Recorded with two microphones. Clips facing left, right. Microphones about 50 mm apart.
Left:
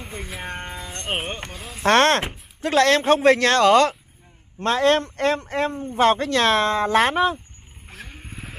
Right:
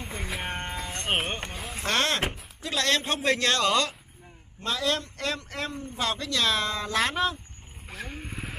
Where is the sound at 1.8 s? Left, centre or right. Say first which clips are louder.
Left 10 dB; left.